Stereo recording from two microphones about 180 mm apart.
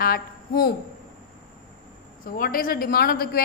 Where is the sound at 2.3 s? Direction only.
50° left (ahead or behind).